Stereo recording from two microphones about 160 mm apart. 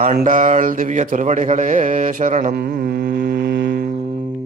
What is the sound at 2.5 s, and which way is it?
Carnatic music, 90° right.